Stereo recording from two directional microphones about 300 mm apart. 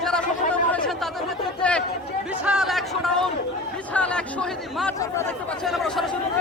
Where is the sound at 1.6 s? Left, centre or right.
Centre.